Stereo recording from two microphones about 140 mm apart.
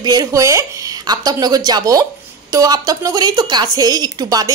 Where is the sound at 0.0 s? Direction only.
25° right (ahead or behind).